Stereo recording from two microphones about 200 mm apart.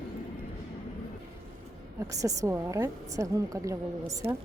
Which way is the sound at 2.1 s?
15° right (ahead or behind).